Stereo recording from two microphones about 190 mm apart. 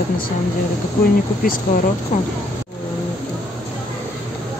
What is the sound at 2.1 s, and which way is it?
Speech, 45° left (ahead or behind).